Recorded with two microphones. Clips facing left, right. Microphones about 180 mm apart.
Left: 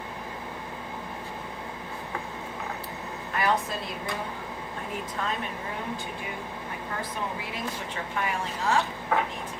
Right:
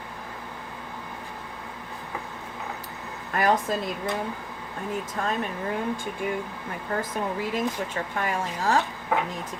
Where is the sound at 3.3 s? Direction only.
50° right (ahead or behind).